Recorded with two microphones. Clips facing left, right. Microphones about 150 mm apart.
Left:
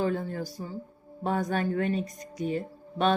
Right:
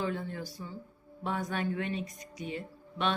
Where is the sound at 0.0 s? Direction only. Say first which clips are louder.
Left 6 dB; 40° left (ahead or behind).